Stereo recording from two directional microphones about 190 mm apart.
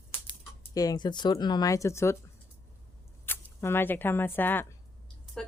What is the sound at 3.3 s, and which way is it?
Speech, 10° left (ahead or behind).